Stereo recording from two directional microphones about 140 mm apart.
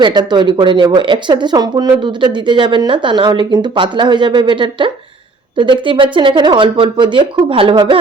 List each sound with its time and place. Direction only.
0.0 s speech: 30° right (ahead or behind)